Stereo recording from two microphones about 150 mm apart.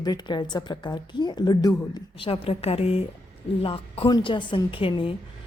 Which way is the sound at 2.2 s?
40° left (ahead or behind).